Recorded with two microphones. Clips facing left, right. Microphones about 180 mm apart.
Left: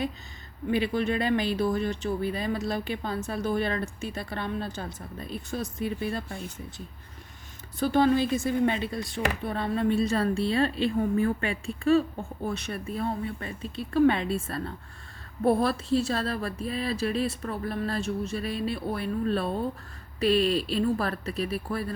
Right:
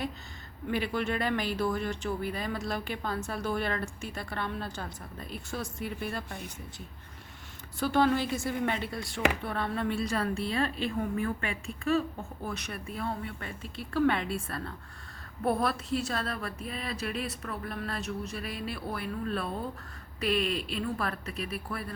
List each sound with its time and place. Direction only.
0.7 s a woman's voice: 20° left (ahead or behind)
7.8 s a woman's voice: 20° left (ahead or behind)